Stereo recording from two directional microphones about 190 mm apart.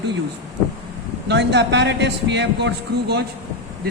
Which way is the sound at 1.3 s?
65° right (ahead or behind).